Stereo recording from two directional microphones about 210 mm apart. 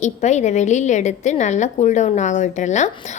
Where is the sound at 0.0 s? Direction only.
35° left (ahead or behind).